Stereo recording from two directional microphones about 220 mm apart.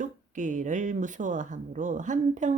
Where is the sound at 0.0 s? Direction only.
35° right (ahead or behind).